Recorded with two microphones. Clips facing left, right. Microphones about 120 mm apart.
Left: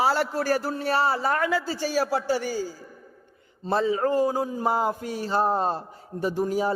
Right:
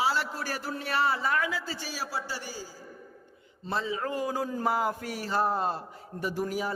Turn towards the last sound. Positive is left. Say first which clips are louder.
# left 6 dB
turn(degrees=30)  # may be behind; listen again after turning